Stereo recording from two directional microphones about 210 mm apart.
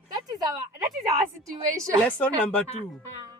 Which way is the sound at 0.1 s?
15° right (ahead or behind).